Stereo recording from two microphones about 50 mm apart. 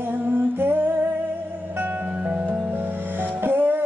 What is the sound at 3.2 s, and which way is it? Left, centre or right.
Music, right.